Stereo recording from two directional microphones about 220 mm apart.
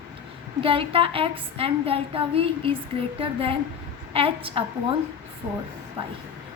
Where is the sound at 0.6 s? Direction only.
25° right (ahead or behind).